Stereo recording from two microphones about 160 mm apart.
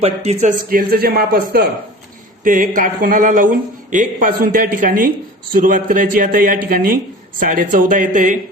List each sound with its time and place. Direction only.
0.0 s speech: 40° right (ahead or behind)
0.7 s speech: 65° right (ahead or behind)
2.4 s speech: 55° right (ahead or behind)